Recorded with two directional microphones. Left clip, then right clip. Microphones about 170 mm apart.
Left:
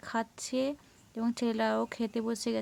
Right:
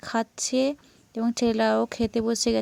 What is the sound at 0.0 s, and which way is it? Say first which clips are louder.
Speech: right 7 dB; 35° right (ahead or behind).